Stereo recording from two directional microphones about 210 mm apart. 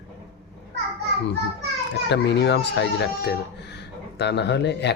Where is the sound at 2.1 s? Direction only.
55° left (ahead or behind).